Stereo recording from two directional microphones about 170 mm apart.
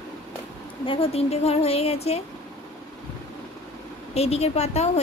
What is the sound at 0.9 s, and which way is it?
A woman's voice, 35° left (ahead or behind).